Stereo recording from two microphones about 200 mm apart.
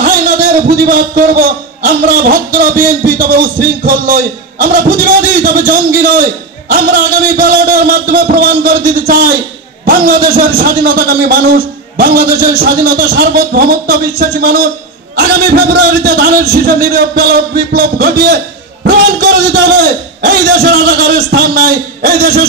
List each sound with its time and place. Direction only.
0.0 s a man's voice: 45° right (ahead or behind)
18.9 s a sound: 55° right (ahead or behind)
20.2 s a man's voice: 55° right (ahead or behind)